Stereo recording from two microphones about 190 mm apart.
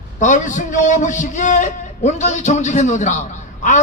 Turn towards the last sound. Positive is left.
turn(degrees=40)  # may be behind; listen again after turning